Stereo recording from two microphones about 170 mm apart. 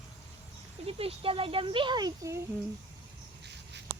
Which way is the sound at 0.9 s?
35° right (ahead or behind).